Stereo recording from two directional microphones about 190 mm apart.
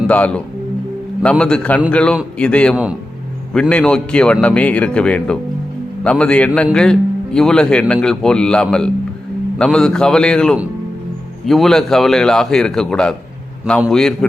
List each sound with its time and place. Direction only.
0.1 s a man's voice: 5° left (ahead or behind)